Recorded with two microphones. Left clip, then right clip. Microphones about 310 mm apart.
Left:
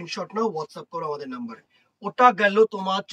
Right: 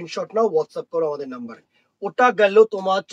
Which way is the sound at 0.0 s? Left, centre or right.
Centre.